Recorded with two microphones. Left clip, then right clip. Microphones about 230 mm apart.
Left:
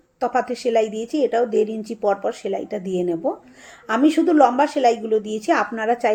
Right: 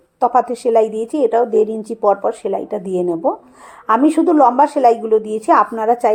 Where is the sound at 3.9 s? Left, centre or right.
Centre.